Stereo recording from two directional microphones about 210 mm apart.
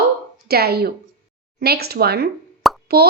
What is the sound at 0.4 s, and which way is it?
A woman's voice, 50° right (ahead or behind).